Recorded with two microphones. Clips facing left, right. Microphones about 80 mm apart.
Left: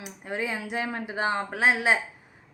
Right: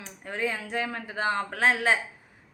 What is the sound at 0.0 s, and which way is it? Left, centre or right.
A woman's voice, centre.